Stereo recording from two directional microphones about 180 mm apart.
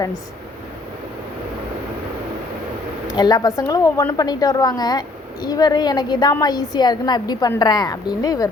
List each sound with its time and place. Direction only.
3.1 s a woman's voice: 20° left (ahead or behind)